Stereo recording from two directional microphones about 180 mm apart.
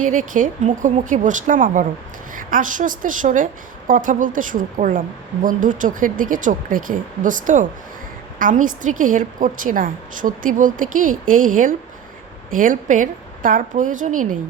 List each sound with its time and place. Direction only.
0.0 s a woman's voice: 45° right (ahead or behind)